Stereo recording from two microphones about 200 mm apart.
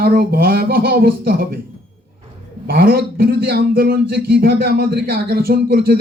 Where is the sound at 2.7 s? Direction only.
50° right (ahead or behind).